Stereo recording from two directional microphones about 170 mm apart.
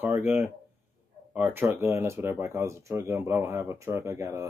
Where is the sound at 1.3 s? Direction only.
10° right (ahead or behind).